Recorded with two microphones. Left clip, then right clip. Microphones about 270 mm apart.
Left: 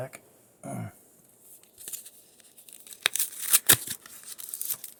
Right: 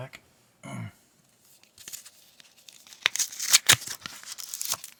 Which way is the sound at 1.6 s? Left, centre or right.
Right.